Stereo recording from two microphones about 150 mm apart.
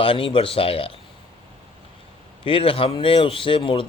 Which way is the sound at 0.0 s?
35° left (ahead or behind).